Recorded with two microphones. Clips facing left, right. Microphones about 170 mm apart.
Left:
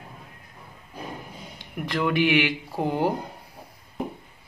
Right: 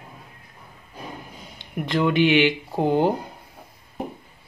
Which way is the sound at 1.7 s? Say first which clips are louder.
Right 4 dB; 20° right (ahead or behind).